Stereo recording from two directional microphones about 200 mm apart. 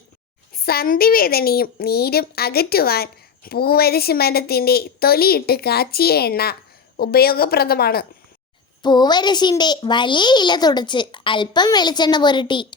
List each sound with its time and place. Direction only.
0.5 s a woman's voice: 50° left (ahead or behind)
8.8 s a child's voice: 20° left (ahead or behind)